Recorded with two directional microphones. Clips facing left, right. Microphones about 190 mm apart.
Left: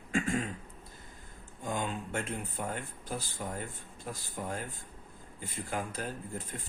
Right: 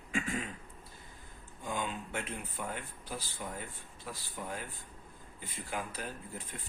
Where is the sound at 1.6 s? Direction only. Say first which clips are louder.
Left 3 dB; 45° left (ahead or behind).